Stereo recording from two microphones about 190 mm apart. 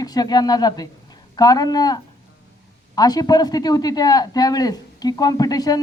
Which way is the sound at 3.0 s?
20° left (ahead or behind).